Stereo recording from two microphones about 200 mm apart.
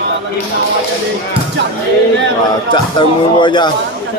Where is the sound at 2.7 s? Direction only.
25° left (ahead or behind).